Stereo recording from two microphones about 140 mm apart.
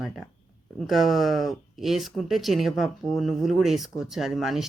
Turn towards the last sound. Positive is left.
turn(degrees=0)  # may be behind; listen again after turning